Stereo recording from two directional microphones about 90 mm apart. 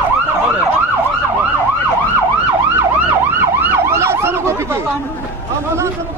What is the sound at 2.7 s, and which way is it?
Emergency vehicle, 25° right (ahead or behind).